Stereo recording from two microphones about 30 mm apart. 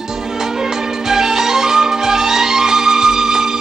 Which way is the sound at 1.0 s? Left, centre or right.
Centre.